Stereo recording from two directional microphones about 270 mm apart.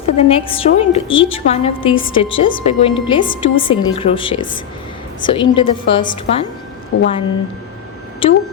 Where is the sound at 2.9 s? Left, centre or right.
Centre.